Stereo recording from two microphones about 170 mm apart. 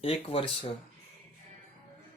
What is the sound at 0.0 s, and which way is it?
Speech, 35° left (ahead or behind).